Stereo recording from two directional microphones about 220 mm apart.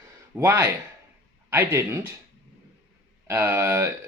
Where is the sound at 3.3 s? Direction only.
10° right (ahead or behind).